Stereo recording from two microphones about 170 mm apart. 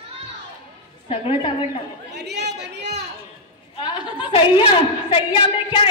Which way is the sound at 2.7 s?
80° right.